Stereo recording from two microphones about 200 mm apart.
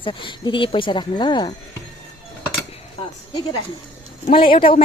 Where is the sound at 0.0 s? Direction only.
25° left (ahead or behind).